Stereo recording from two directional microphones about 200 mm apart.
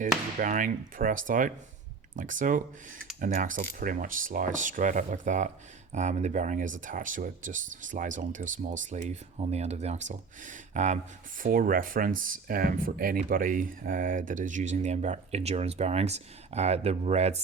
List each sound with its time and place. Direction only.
0.3 s speech: 40° right (ahead or behind)